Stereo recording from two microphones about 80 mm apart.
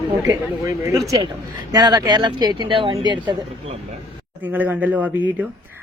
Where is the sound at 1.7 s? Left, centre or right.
Right.